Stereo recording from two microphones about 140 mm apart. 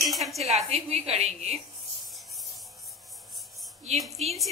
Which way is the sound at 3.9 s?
50° right (ahead or behind).